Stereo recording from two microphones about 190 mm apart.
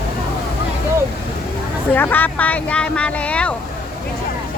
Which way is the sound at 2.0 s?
10° left (ahead or behind).